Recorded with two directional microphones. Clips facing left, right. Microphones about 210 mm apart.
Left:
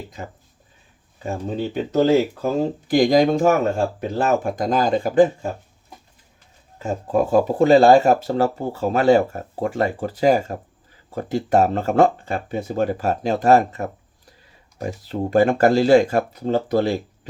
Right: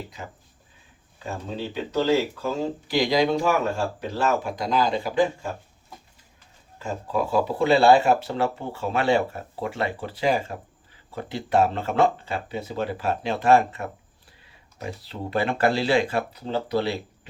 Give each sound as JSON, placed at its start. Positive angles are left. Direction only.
{"t": 1.5, "sound": "speech", "side_deg": 50}
{"t": 6.8, "sound": "speech", "side_deg": 50}